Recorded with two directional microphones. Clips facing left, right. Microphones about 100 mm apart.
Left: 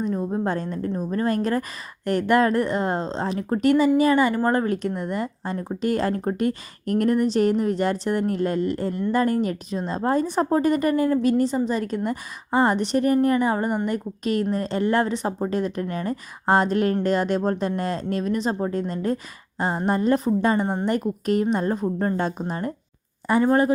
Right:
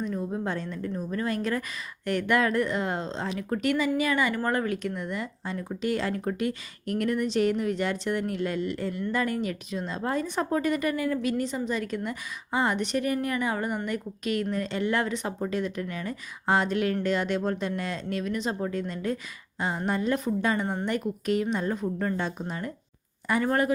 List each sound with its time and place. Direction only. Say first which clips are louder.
0.0 s speech: left 6 dB; 40° left (ahead or behind)
23.2 s speech: left 6 dB; 30° left (ahead or behind)